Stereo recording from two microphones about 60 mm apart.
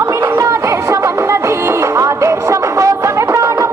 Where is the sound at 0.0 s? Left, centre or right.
Right.